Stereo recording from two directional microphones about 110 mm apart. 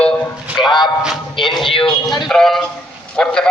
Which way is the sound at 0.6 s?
40° left (ahead or behind).